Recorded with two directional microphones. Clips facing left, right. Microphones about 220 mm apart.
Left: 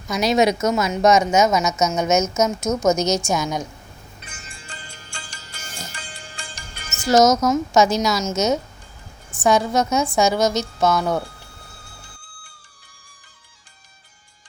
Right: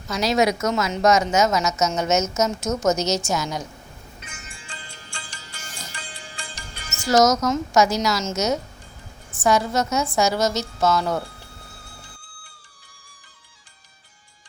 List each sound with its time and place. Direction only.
0.1 s a woman's voice: 20° left (ahead or behind)
4.2 s music: 35° left (ahead or behind)
7.1 s a woman's voice: 25° left (ahead or behind)
9.3 s a woman's voice: 15° left (ahead or behind)